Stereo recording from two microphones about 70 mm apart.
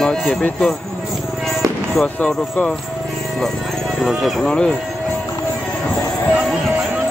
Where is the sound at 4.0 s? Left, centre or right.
Centre.